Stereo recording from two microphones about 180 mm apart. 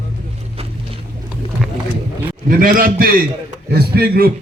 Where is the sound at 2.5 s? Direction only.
50° right (ahead or behind).